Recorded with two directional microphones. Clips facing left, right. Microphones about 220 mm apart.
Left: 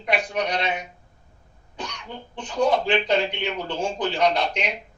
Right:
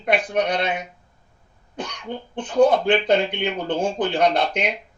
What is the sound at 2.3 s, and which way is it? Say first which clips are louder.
Speech: right 5 dB; 55° right (ahead or behind).